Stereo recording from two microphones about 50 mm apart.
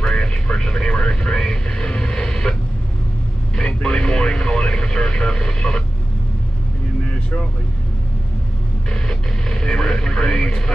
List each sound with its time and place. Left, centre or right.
0.0 s vehicle: centre
3.5 s radio: centre
8.9 s radio: centre